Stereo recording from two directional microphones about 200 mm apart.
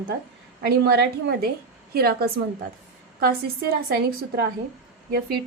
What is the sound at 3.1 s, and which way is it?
Speech, 50° right (ahead or behind).